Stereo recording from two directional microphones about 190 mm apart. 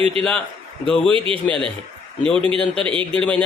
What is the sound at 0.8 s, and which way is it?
Speech, 5° left (ahead or behind).